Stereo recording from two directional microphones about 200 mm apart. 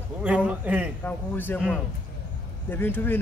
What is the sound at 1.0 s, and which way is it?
Speech, 10° left (ahead or behind).